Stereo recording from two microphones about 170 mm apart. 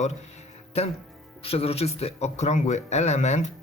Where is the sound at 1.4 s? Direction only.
35° left (ahead or behind).